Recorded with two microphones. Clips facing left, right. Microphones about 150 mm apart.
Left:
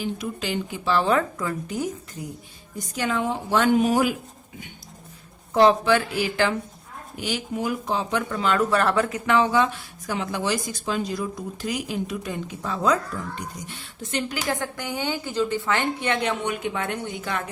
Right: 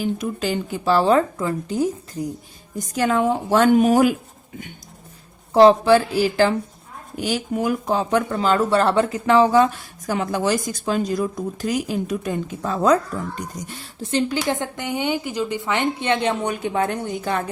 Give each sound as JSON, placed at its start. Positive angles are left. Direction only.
{"t": 0.0, "sound": "speech", "side_deg": -45}
{"t": 2.9, "sound": "a woman's voice", "side_deg": -45}
{"t": 5.5, "sound": "speech", "side_deg": -35}
{"t": 7.2, "sound": "speech", "side_deg": -45}
{"t": 16.4, "sound": "speech", "side_deg": -35}